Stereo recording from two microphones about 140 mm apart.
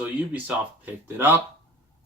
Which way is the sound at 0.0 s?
10° right (ahead or behind).